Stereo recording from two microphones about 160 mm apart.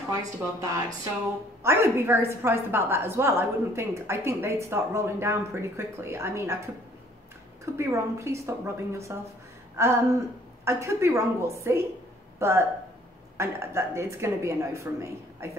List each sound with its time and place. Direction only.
0.1 s a woman's voice: 20° right (ahead or behind)
7.6 s a woman's voice: 15° right (ahead or behind)